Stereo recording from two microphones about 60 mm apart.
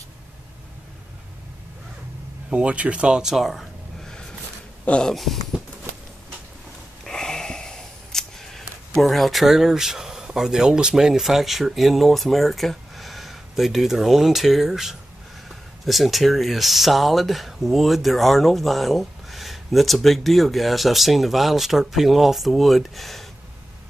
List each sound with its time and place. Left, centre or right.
2.5 s speech: right; by 4.1 s centre
4.8 s speech: centre
5.1 s speech: centre
7.1 s a sound: centre
15.4 s speech: centre